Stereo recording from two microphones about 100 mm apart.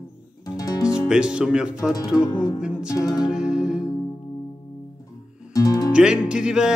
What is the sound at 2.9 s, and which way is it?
Music, 35° left (ahead or behind).